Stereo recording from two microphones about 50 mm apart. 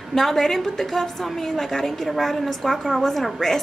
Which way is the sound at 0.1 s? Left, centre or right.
Centre.